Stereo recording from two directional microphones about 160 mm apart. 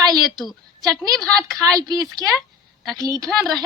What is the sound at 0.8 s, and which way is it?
A woman's voice, 25° right (ahead or behind).